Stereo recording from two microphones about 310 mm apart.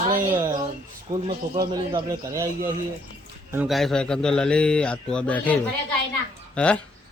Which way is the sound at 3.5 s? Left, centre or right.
Centre.